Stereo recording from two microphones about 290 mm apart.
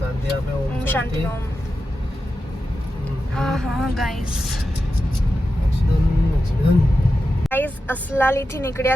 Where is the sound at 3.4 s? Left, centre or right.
Centre.